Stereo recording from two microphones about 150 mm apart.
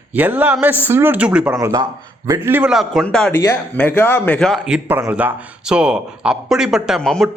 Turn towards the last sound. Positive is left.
turn(degrees=5)  # may be behind; listen again after turning